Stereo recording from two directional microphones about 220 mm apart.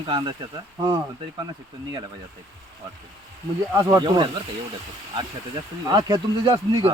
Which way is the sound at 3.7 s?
15° right (ahead or behind).